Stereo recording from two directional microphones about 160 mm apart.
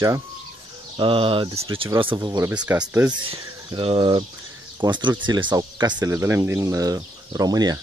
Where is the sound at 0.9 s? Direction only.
35° right (ahead or behind).